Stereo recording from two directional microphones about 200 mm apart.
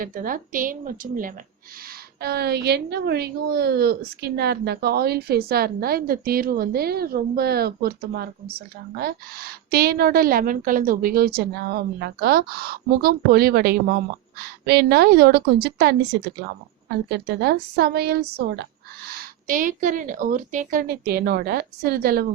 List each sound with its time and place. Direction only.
0.0 s a woman's voice: 45° right (ahead or behind)
17.1 s a woman's voice: 55° right (ahead or behind)